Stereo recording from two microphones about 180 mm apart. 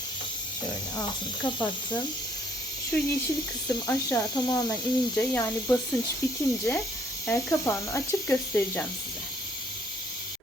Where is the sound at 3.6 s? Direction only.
20° left (ahead or behind).